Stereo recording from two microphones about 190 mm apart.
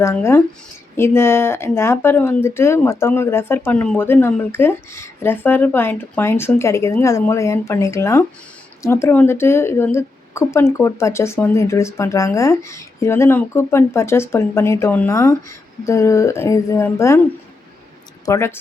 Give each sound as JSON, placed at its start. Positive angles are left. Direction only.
{"t": 0.0, "sound": "a woman's voice", "side_deg": 15}
{"t": 18.3, "sound": "a woman's voice", "side_deg": 15}